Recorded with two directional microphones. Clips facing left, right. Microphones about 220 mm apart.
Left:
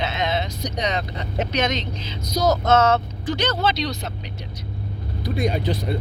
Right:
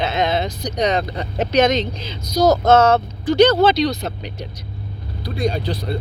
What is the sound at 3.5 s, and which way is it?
Speech, 35° right (ahead or behind).